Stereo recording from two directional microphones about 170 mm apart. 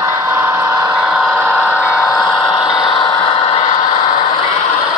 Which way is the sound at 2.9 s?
30° left (ahead or behind).